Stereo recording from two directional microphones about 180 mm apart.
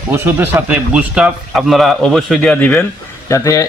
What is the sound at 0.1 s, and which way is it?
A man's voice, 10° right (ahead or behind).